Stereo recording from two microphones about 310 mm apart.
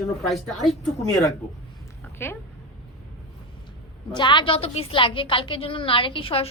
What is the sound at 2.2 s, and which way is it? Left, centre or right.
Speech, centre.